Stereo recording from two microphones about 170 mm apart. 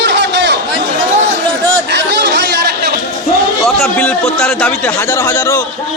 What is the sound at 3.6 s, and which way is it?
A man's voice, centre (ahead or behind).